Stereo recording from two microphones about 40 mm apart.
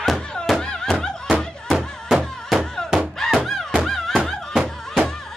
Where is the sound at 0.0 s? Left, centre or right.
Centre.